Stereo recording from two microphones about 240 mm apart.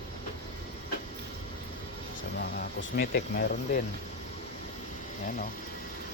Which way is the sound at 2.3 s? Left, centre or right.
Left.